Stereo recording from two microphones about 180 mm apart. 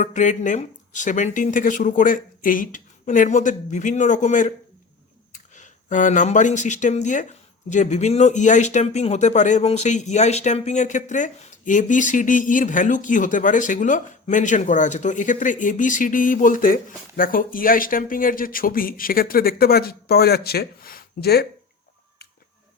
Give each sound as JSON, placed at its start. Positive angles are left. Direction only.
{"t": 0.0, "sound": "speech", "side_deg": 45}